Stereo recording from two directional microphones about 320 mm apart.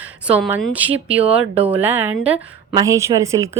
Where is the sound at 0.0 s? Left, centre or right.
Centre.